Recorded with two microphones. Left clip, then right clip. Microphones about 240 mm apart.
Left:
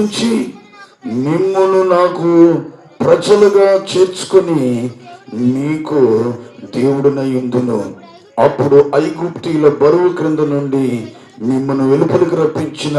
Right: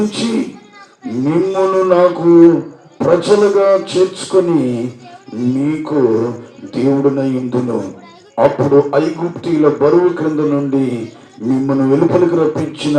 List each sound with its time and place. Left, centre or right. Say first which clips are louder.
0.1 s a man's voice: left 2 dB; left